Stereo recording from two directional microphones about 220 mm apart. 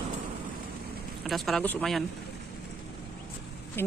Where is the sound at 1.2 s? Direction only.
Centre (ahead or behind).